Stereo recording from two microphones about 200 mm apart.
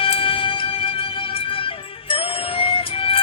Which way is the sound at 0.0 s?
25° left (ahead or behind).